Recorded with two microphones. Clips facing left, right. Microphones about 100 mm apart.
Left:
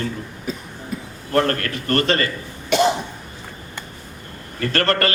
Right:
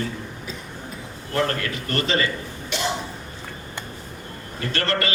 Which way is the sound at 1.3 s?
55° left (ahead or behind).